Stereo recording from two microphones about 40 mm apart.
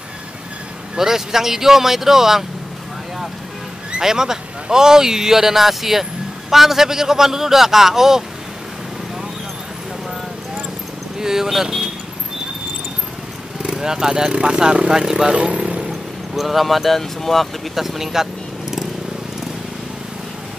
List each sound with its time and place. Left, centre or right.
0.9 s speech: centre
4.0 s speech: centre
11.1 s speech: centre
13.6 s speech: centre
15.3 s vehicle: right
16.3 s speech: centre
17.7 s a sound: centre